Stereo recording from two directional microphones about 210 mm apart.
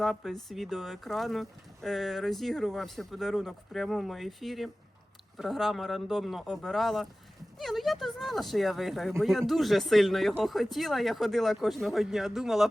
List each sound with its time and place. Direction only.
0.0 s speech: centre (ahead or behind)